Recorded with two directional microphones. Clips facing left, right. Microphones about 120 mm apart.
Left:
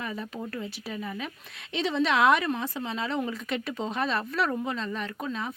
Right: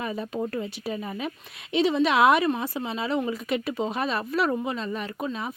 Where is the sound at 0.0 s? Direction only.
20° right (ahead or behind).